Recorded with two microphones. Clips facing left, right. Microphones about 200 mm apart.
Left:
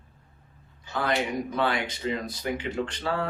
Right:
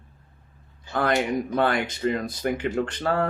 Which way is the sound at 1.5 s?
50° right (ahead or behind).